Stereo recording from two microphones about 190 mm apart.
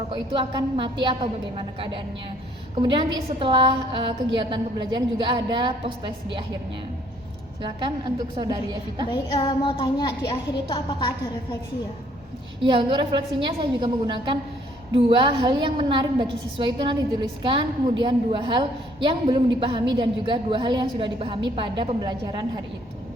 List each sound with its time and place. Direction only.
0.1 s a woman's voice: 25° right (ahead or behind)
7.6 s a woman's voice: 25° right (ahead or behind)
9.0 s a woman's voice: 25° left (ahead or behind)
12.5 s a woman's voice: 25° right (ahead or behind)